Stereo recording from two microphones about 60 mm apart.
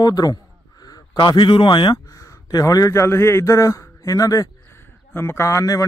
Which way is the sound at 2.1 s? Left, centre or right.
Left.